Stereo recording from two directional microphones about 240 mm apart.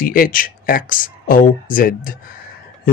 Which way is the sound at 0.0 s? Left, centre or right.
Left.